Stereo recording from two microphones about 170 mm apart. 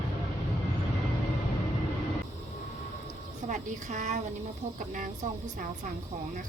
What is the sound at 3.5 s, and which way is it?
Speech, 45° right (ahead or behind).